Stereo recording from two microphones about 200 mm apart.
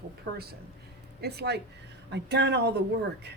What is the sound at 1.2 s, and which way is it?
Speech, 55° right (ahead or behind).